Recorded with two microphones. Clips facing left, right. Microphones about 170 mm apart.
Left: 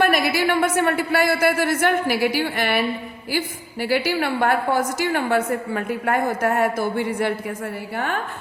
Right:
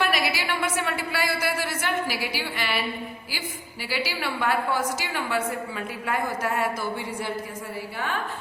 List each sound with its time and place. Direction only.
0.0 s a woman's voice: 50° left (ahead or behind)